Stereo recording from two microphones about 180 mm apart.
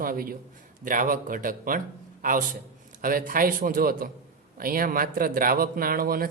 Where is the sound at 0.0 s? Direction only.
50° right (ahead or behind).